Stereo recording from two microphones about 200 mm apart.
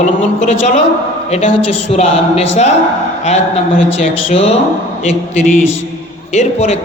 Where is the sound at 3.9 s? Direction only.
30° left (ahead or behind).